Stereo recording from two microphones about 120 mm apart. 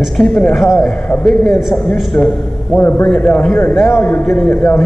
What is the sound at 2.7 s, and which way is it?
A man's voice, 20° left (ahead or behind).